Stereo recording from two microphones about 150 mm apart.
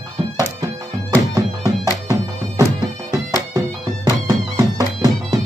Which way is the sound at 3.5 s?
25° right (ahead or behind).